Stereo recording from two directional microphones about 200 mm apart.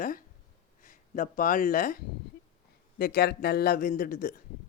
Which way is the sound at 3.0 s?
50° left (ahead or behind).